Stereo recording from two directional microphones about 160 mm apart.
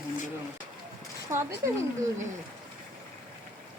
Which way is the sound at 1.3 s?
15° right (ahead or behind).